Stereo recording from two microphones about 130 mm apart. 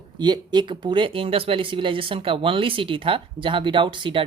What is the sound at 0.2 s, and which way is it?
Speech, 35° right (ahead or behind).